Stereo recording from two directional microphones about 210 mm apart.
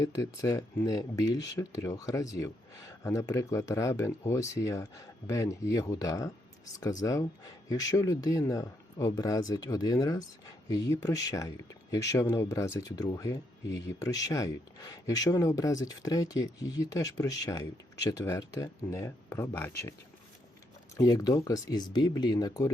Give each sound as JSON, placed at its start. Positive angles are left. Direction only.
{"t": 0.0, "sound": "speech", "side_deg": 15}
{"t": 20.9, "sound": "speech", "side_deg": 15}